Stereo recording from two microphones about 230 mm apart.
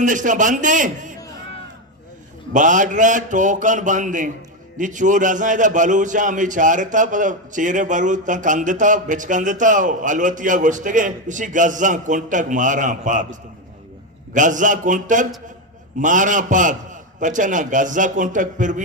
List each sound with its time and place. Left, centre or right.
0.0 s a man's voice: right
2.5 s a man's voice: right
14.3 s a man's voice: right